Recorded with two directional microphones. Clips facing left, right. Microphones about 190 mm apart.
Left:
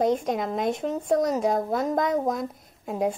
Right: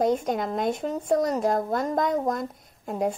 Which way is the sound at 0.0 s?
Centre (ahead or behind).